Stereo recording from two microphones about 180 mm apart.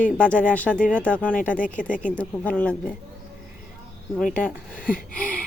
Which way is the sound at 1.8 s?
45° left (ahead or behind).